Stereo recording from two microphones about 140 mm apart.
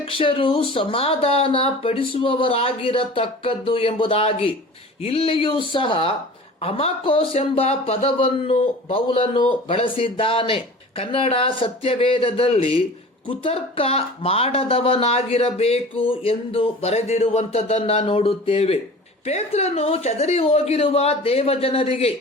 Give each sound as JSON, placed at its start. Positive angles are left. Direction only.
{"t": 0.0, "sound": "speech", "side_deg": 40}